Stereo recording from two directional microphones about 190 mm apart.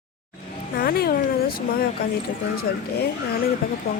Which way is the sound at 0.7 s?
55° left (ahead or behind).